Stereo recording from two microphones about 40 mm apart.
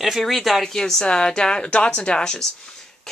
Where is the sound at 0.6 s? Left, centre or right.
Centre.